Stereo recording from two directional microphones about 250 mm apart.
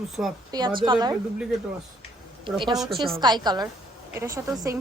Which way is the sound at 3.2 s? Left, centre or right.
Centre.